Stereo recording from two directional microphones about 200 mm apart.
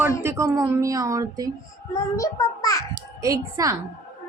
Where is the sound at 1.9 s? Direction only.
15° left (ahead or behind).